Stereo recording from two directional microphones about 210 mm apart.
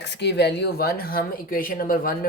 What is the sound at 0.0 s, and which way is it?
Speech, 55° left (ahead or behind).